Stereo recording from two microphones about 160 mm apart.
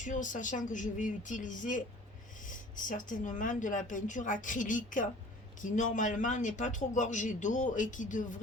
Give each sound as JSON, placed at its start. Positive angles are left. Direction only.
{"t": 0.0, "sound": "speech", "side_deg": 50}